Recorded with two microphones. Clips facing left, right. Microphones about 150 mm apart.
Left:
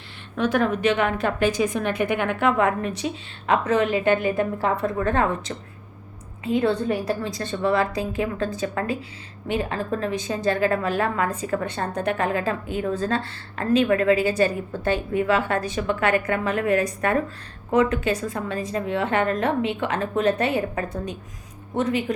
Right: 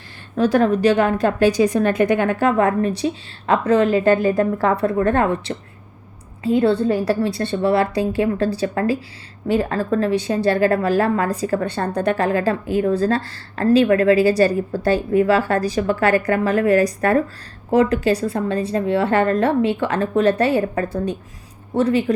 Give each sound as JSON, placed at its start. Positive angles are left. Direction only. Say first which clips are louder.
{"t": 0.3, "sound": "a woman's voice", "louder": "right 6 dB", "side_deg": -35}
{"t": 4.9, "sound": "a woman's voice", "louder": "right 5 dB", "side_deg": -50}
{"t": 6.4, "sound": "a woman's voice", "louder": "right 5 dB", "side_deg": -35}